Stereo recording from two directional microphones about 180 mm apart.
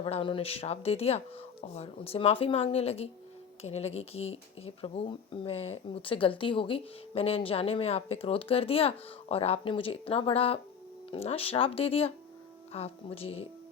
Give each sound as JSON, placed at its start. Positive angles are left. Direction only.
{"t": 0.0, "sound": "speech", "side_deg": 30}